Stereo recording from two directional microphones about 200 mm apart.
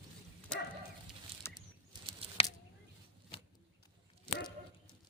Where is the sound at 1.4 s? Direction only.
10° left (ahead or behind).